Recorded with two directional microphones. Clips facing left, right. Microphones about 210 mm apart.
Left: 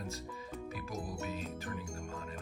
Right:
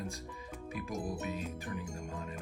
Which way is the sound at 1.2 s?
Centre (ahead or behind).